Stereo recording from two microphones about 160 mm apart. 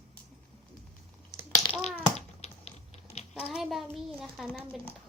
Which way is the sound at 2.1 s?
40° left (ahead or behind).